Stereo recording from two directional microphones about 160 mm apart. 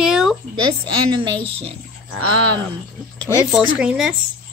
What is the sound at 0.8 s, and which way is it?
Speech, 30° right (ahead or behind).